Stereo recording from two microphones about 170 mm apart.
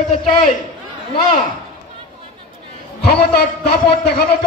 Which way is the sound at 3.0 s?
70° left (ahead or behind).